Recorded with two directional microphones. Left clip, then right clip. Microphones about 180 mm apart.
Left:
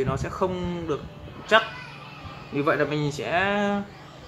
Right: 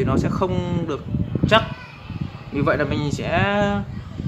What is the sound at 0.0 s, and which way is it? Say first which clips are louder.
Speech: right 4 dB; 40° right (ahead or behind).